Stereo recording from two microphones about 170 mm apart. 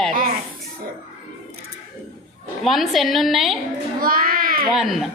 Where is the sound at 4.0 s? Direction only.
60° right (ahead or behind).